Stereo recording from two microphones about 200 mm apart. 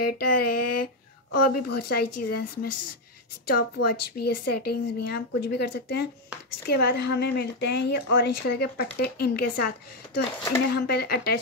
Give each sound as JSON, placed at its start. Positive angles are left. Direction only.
{"t": 0.0, "sound": "a woman's voice", "side_deg": 50}